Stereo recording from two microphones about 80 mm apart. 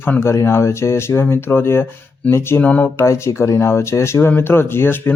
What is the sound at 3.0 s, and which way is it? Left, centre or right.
Speech, left.